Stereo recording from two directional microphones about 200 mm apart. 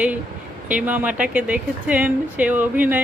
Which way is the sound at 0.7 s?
5° right (ahead or behind).